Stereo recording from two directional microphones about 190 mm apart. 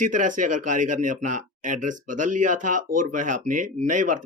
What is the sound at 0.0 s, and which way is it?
Speech, 45° right (ahead or behind).